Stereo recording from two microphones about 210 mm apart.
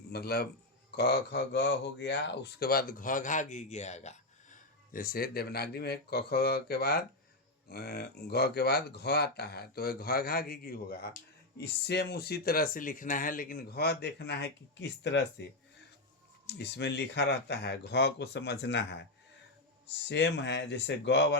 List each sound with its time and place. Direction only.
0.1 s speech: 50° left (ahead or behind)
16.5 s a man's voice: 55° left (ahead or behind)